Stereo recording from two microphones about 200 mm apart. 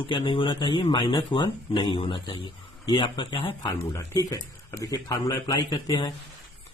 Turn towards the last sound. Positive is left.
turn(degrees=20)  # may be behind; listen again after turning